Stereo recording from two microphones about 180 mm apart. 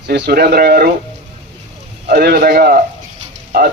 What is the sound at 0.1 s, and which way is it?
Speech, 65° right (ahead or behind).